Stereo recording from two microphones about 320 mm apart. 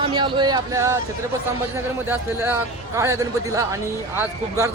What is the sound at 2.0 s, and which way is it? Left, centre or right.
Speech, centre.